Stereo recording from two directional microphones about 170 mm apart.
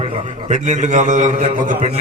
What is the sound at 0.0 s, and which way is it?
A man's voice, 40° right (ahead or behind).